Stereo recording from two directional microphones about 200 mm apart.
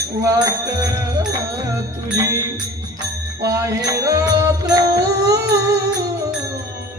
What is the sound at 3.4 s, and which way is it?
Music, 15° right (ahead or behind).